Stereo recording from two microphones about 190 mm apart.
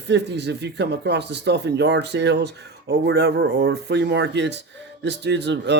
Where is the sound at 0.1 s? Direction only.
65° right (ahead or behind).